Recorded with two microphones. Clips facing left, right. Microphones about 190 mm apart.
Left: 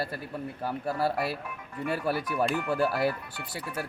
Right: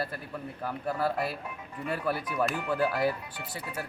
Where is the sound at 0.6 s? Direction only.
30° left (ahead or behind).